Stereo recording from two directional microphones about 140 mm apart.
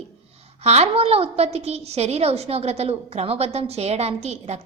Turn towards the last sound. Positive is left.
turn(degrees=-50)  # may be behind; listen again after turning